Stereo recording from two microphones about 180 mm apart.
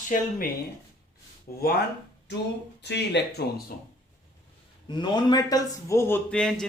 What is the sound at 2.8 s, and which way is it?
Speech, 70° left (ahead or behind).